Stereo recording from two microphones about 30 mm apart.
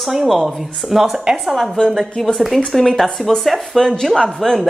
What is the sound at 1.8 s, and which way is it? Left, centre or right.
Speech, left.